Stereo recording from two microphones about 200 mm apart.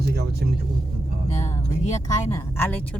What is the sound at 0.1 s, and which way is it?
Speech, 55° right (ahead or behind).